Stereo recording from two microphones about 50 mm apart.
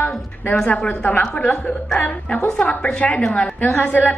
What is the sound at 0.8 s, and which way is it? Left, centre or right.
Speech, left.